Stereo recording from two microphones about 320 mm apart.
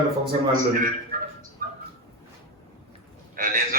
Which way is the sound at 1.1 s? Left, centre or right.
Right.